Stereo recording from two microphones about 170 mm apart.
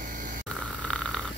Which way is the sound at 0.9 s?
5° left (ahead or behind).